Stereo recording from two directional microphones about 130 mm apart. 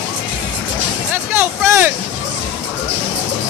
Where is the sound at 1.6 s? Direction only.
20° right (ahead or behind).